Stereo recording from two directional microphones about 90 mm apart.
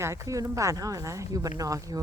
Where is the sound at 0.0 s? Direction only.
35° right (ahead or behind).